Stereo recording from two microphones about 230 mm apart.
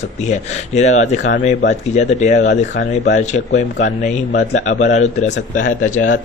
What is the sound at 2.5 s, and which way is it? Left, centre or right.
Speech, left.